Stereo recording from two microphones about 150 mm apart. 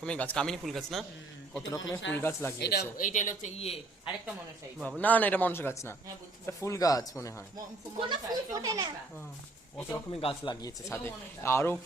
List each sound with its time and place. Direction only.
0.0 s speech: 10° left (ahead or behind)
1.7 s speech: 15° left (ahead or behind)
2.6 s speech: 90° left; by 4.1 s 45° left (ahead or behind)
4.8 s speech: 10° left (ahead or behind)
8.1 s speech: 25° right (ahead or behind)
10.1 s speech: 40° left (ahead or behind); by 11.8 s 15° left (ahead or behind)